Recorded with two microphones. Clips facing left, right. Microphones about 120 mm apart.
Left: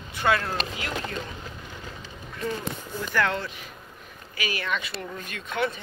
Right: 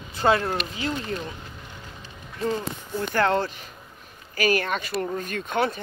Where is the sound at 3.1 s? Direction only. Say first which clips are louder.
Right 4 dB; 40° right (ahead or behind).